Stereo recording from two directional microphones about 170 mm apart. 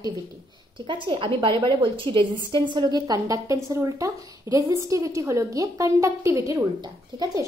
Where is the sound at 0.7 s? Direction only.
30° right (ahead or behind).